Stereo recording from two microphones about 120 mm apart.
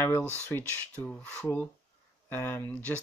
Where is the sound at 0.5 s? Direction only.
15° left (ahead or behind).